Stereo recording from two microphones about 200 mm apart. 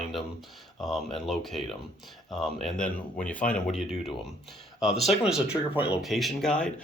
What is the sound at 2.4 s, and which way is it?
Speech, centre (ahead or behind).